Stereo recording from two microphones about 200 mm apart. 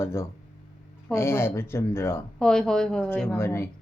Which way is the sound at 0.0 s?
10° left (ahead or behind).